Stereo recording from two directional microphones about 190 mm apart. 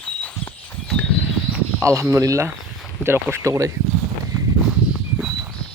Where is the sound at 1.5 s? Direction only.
5° right (ahead or behind).